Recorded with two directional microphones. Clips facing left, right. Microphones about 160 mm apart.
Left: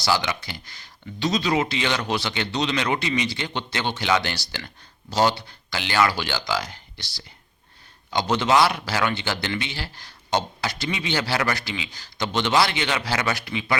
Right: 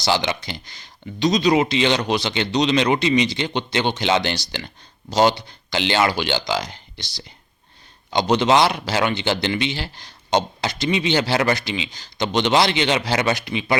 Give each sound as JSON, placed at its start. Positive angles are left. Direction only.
{"t": 0.0, "sound": "a man's voice", "side_deg": -25}